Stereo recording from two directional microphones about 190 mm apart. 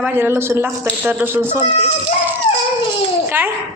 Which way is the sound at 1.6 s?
30° left (ahead or behind).